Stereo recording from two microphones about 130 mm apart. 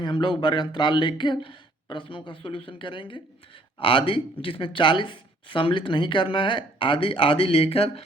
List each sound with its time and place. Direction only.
0.0 s speech: 40° left (ahead or behind)